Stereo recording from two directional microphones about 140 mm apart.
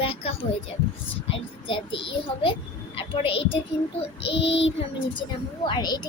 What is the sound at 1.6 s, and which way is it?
A child's voice, 35° left (ahead or behind).